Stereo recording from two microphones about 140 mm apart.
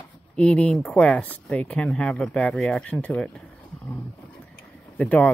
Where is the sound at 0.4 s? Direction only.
5° left (ahead or behind).